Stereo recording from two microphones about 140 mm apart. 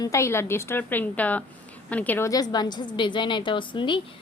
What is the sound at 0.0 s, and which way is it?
A woman's voice, 20° left (ahead or behind).